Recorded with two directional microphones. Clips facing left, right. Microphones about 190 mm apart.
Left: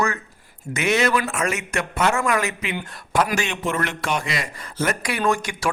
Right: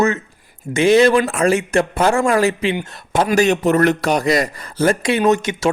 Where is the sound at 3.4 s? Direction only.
40° right (ahead or behind); by 5.7 s 20° right (ahead or behind).